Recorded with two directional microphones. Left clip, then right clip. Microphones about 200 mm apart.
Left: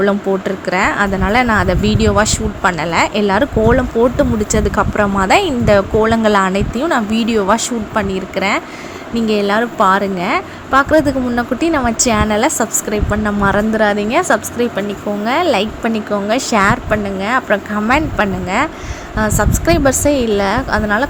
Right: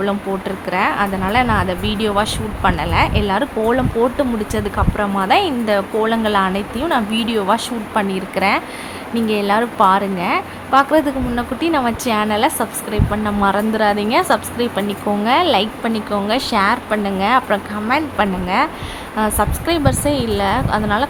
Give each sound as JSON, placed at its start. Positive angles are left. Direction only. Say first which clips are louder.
{"t": 0.0, "sound": "speech", "louder": "left 5 dB", "side_deg": 15}